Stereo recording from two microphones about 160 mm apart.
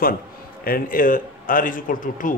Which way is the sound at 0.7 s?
65° left (ahead or behind).